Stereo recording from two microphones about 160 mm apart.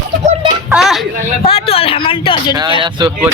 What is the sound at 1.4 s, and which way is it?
Speech, 40° left (ahead or behind).